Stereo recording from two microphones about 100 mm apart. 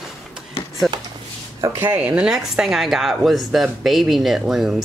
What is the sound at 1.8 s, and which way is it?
A woman's voice, 15° right (ahead or behind).